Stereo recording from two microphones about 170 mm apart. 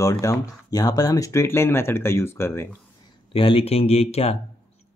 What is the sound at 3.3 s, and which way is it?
Speech, 35° left (ahead or behind).